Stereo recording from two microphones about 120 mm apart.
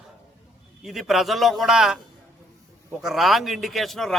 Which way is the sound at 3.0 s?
Centre (ahead or behind).